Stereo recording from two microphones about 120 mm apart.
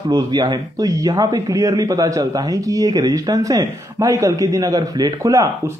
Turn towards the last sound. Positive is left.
turn(degrees=-25)  # may be behind; listen again after turning